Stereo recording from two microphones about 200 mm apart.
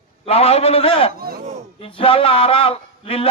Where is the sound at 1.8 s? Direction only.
25° left (ahead or behind).